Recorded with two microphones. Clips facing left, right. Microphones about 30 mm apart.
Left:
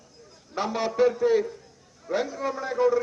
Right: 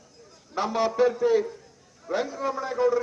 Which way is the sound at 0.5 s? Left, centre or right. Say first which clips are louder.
Right 1 dB; centre.